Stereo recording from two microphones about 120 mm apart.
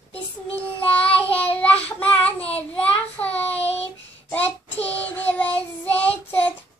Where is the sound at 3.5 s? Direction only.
60° left (ahead or behind).